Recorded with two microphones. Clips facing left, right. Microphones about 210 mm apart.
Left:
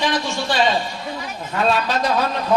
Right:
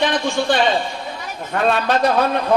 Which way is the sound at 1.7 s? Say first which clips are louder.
Right 3 dB; 55° right (ahead or behind).